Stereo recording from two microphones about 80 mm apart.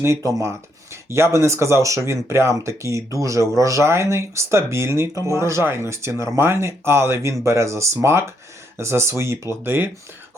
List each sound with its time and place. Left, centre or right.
0.0 s speech: right